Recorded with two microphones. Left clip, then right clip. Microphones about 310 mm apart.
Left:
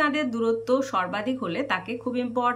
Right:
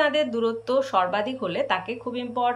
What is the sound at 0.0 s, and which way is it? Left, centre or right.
Speech, centre.